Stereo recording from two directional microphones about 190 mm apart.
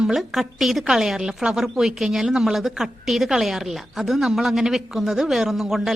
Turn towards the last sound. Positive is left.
turn(degrees=0)  # may be behind; listen again after turning